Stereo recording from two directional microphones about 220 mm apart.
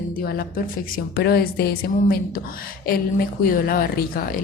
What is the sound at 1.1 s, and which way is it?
A woman's voice, 45° left (ahead or behind).